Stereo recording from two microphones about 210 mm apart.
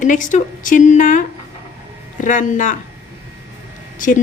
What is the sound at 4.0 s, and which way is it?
Speech, 40° left (ahead or behind).